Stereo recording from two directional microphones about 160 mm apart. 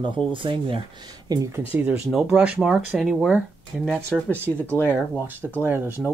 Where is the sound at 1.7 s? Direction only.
10° right (ahead or behind).